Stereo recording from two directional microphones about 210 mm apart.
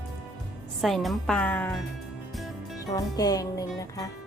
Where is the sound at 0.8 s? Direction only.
Centre (ahead or behind).